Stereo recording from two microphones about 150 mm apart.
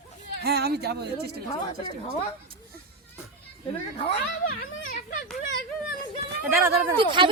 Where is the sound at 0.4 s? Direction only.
90° right.